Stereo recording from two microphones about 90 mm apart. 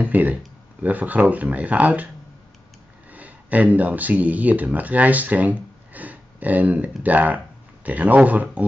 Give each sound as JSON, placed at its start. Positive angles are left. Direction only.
{"t": 0.0, "sound": "a sound", "side_deg": -20}
{"t": 0.8, "sound": "speech", "side_deg": -20}
{"t": 3.1, "sound": "speech", "side_deg": -15}